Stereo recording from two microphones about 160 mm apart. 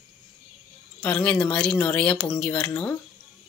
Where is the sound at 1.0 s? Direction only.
10° left (ahead or behind).